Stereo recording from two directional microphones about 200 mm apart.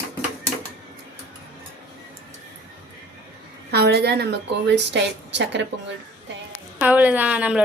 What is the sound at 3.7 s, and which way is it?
A woman's voice, 55° right (ahead or behind).